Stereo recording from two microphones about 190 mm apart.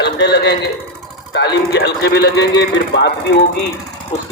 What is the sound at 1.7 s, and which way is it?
Speech, 65° left (ahead or behind).